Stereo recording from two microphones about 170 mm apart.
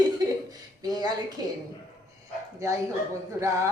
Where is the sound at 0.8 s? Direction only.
25° right (ahead or behind).